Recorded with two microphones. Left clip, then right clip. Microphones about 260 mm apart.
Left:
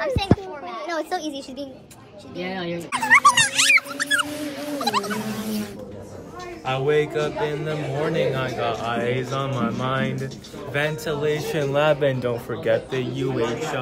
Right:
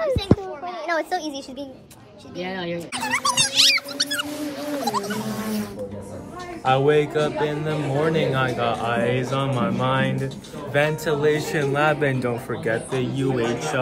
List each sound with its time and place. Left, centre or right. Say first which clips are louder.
0.8 s a woman's voice: right 3 dB; centre
2.3 s speech: even; centre
4.3 s a man's voice: right 1 dB; centre
6.6 s speech: right 3 dB; centre
11.6 s a man's voice: left 2 dB; left